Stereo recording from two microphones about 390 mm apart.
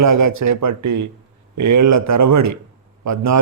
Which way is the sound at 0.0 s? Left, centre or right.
Right.